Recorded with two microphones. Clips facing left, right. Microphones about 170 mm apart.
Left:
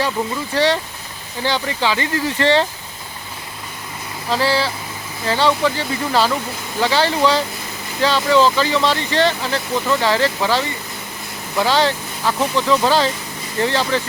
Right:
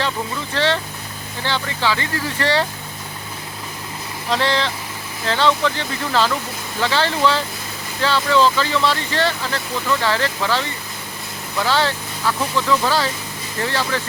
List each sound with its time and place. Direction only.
0.5 s speech: 15° left (ahead or behind)
4.3 s speech: 5° left (ahead or behind)
11.6 s speech: 15° left (ahead or behind)